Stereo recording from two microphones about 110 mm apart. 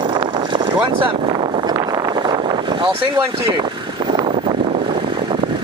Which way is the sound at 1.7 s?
40° right (ahead or behind).